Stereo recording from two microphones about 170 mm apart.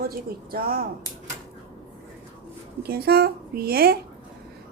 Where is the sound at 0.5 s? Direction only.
60° right (ahead or behind).